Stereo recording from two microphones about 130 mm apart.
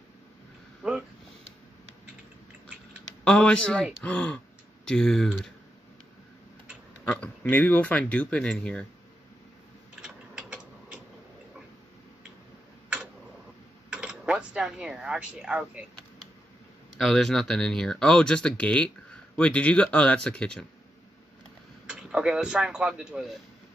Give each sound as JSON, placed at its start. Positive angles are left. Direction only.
{"t": 0.8, "sound": "a sound", "side_deg": -5}
{"t": 3.3, "sound": "speech", "side_deg": 10}
{"t": 7.1, "sound": "speech", "side_deg": 15}
{"t": 9.9, "sound": "mechanisms", "side_deg": -5}
{"t": 13.8, "sound": "a sound", "side_deg": -5}
{"t": 16.9, "sound": "speech", "side_deg": 0}
{"t": 21.8, "sound": "speech", "side_deg": -5}